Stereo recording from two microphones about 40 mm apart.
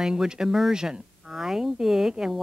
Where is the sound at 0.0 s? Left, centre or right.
Centre.